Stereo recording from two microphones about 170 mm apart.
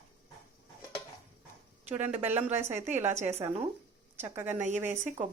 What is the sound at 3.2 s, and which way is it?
Speech, 40° right (ahead or behind).